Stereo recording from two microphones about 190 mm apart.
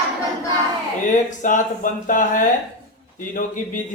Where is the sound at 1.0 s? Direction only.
40° left (ahead or behind).